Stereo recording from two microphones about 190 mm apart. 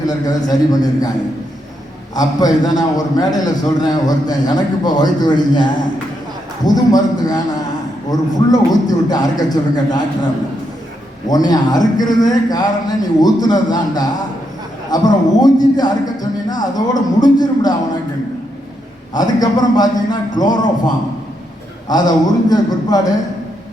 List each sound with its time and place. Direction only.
0.1 s a man's voice: 20° left (ahead or behind)
2.1 s a man's voice: 20° left (ahead or behind)
11.3 s a man's voice: 20° left (ahead or behind)
19.1 s a man's voice: 20° left (ahead or behind)